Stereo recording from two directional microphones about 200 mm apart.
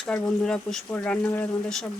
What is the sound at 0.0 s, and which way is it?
Speech, 5° left (ahead or behind).